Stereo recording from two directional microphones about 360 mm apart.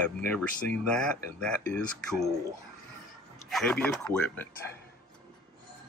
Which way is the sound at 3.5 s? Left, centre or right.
Centre.